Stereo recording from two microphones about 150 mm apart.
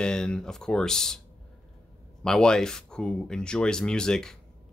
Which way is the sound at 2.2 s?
5° left (ahead or behind).